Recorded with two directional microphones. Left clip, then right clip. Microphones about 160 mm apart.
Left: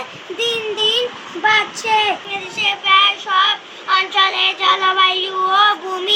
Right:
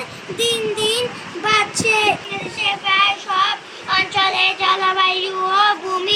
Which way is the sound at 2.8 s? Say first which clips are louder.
Left 4 dB; centre (ahead or behind).